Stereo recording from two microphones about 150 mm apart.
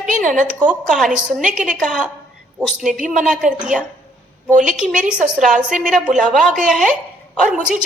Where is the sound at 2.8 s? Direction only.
55° right (ahead or behind).